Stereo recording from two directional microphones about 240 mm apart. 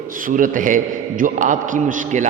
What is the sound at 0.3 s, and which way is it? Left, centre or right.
A man's voice, right.